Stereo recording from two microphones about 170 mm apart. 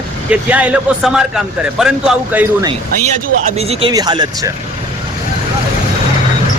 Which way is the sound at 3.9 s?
25° right (ahead or behind).